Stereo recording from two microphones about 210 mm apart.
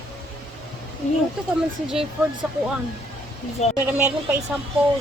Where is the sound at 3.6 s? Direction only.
30° left (ahead or behind).